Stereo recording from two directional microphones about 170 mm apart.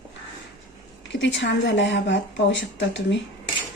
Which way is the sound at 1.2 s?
90° left.